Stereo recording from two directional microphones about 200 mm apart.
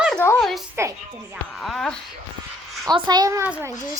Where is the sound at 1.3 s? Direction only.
Centre (ahead or behind).